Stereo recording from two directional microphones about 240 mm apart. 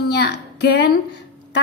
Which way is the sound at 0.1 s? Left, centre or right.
Left.